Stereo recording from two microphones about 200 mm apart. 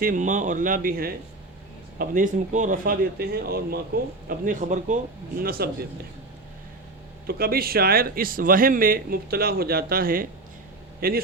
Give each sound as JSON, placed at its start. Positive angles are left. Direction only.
{"t": 0.0, "sound": "speech", "side_deg": -40}
{"t": 7.3, "sound": "speech", "side_deg": -50}